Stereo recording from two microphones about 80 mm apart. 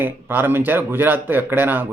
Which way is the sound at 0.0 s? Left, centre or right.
Right.